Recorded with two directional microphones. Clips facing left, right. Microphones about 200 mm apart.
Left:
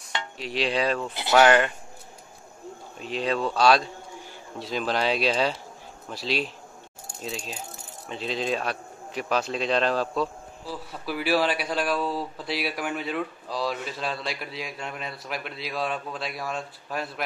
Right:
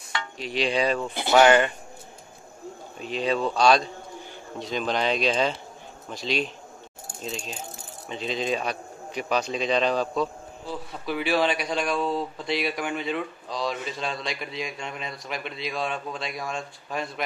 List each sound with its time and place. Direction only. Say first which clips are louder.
0.4 s a man's voice: right 1 dB; centre (ahead or behind)
3.0 s a man's voice: right 1 dB; centre (ahead or behind)